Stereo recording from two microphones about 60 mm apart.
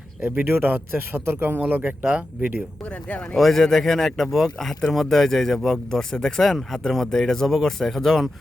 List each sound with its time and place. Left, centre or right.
0.3 s speech: right
2.0 s speech: right
3.3 s speech: centre